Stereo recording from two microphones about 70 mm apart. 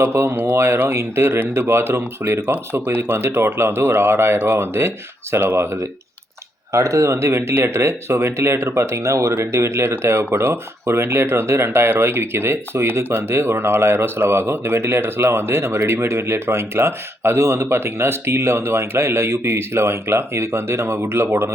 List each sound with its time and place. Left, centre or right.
0.1 s speech: right
5.3 s speech: right
6.7 s speech: right